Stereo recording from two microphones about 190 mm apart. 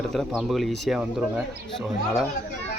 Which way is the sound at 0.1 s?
Centre (ahead or behind).